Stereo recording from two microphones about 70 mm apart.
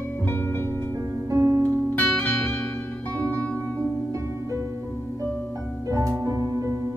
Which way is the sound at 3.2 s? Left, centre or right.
Left.